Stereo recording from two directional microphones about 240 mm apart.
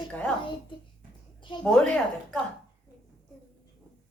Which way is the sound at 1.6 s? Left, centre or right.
Centre.